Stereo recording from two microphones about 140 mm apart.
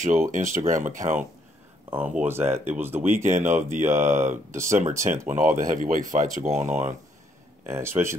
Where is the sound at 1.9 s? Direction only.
15° right (ahead or behind).